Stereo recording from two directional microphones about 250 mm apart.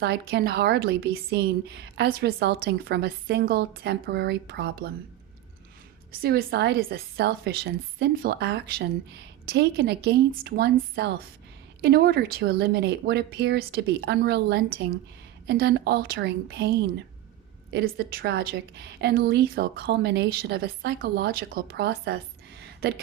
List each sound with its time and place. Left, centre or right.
0.0 s a woman's voice: right
6.1 s a woman's voice: right